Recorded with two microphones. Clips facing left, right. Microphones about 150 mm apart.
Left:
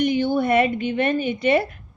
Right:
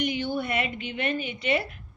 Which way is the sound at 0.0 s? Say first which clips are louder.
Left 8 dB; 45° left (ahead or behind).